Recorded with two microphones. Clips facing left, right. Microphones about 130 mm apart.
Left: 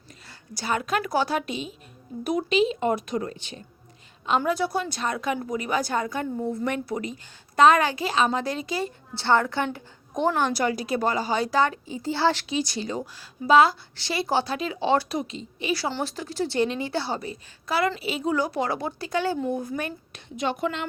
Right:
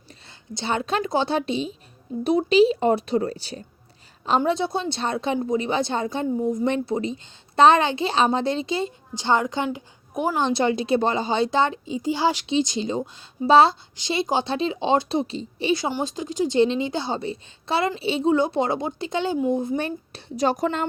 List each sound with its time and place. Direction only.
0.3 s a woman's voice: 25° right (ahead or behind)
4.3 s a woman's voice: 25° right (ahead or behind)
6.4 s a woman's voice: 15° right (ahead or behind)
10.4 s a woman's voice: 25° right (ahead or behind)
15.7 s a woman's voice: 15° right (ahead or behind); by 20.8 s 40° right (ahead or behind)